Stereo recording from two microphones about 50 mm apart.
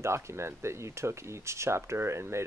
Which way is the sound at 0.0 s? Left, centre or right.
Right.